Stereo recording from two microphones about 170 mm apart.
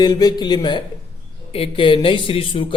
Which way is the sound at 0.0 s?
25° left (ahead or behind).